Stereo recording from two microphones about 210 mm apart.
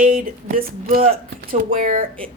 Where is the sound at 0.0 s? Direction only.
40° right (ahead or behind).